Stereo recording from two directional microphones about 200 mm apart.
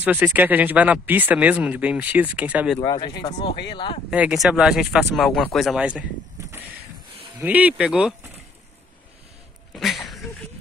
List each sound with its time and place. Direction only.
0.0 s speech: 10° right (ahead or behind)
2.8 s speech: 20° left (ahead or behind)
4.1 s speech: 5° right (ahead or behind)
7.3 s speech: 10° right (ahead or behind)
9.8 s a sound: centre (ahead or behind)